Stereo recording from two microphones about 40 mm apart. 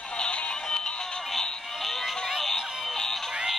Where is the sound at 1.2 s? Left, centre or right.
Centre.